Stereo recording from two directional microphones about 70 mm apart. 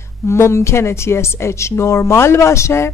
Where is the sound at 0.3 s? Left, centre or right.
Left.